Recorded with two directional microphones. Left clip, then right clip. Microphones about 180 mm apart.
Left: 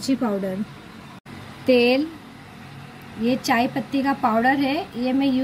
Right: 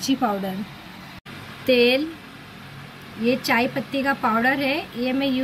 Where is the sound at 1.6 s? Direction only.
40° left (ahead or behind).